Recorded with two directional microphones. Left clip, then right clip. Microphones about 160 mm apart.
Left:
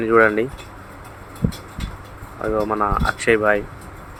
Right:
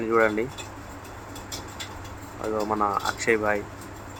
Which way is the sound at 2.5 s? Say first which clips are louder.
Left 4 dB; 15° left (ahead or behind).